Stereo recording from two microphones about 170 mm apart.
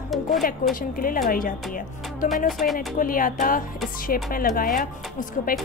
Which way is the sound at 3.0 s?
55° left (ahead or behind).